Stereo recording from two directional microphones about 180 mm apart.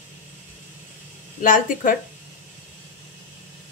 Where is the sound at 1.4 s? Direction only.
50° left (ahead or behind).